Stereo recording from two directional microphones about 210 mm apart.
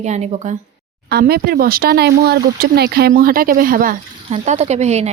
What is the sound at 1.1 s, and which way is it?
Speech, 45° right (ahead or behind).